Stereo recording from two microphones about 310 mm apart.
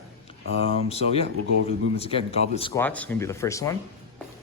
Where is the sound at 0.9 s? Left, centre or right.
Centre.